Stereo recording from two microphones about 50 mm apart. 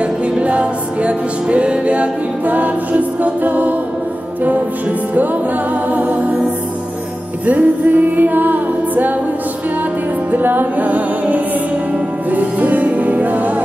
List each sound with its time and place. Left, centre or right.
0.0 s music: right
5.9 s music: right
7.4 s music: right
10.3 s music: right